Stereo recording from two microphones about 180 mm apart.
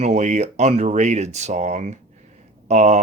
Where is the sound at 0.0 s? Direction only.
40° right (ahead or behind).